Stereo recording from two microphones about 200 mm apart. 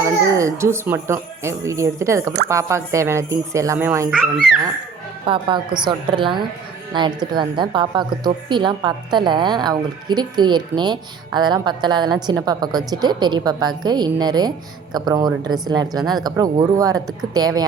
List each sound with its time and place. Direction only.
0.0 s a child's voice: 15° right (ahead or behind)
5.2 s a woman's voice: 25° right (ahead or behind)